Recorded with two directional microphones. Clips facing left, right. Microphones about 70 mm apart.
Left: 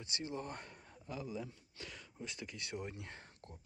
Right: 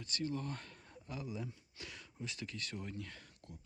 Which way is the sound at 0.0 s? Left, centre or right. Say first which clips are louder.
Right 3 dB; centre.